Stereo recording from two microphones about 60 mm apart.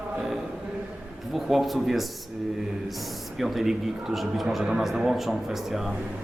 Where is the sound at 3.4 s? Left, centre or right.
Centre.